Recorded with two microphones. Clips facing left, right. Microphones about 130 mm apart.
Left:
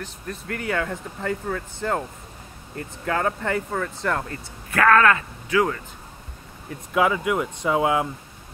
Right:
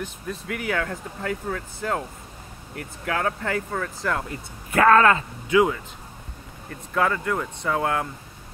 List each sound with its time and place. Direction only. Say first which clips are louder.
0.0 s speech: right 2 dB; 5° right (ahead or behind)
3.1 s speech: left 2 dB; centre (ahead or behind)
4.6 s a man's voice: right 1 dB; 25° right (ahead or behind)
6.7 s speech: left 2 dB; 10° left (ahead or behind)